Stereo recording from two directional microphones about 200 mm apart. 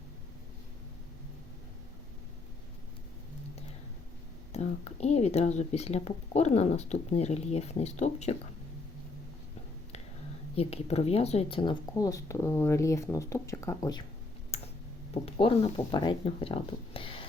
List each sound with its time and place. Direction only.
4.5 s speech: 35° left (ahead or behind)
10.5 s speech: 30° left (ahead or behind)
14.5 s clicking: 30° left (ahead or behind)
15.1 s speech: 25° left (ahead or behind)